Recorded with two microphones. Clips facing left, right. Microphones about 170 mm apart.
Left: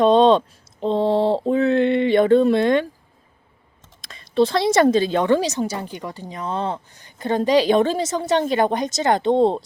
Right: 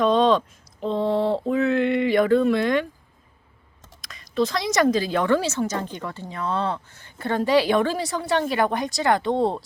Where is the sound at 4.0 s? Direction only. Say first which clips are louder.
Left 5 dB; 30° left (ahead or behind).